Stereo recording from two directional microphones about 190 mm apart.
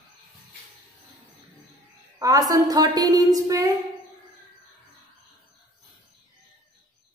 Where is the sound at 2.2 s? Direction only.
20° right (ahead or behind).